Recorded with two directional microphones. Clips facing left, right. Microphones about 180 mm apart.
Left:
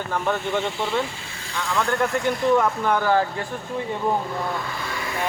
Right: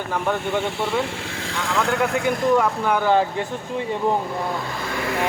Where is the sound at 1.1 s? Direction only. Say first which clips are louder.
Right 8 dB; 80° right.